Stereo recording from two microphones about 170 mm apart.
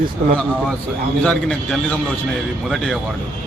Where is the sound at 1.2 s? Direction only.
5° left (ahead or behind).